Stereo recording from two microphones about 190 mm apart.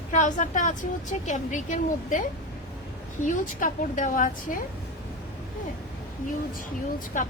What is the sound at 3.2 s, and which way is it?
A woman's voice, 45° left (ahead or behind).